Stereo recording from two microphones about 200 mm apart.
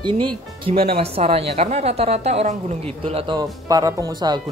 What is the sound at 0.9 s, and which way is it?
A woman's voice, 30° right (ahead or behind).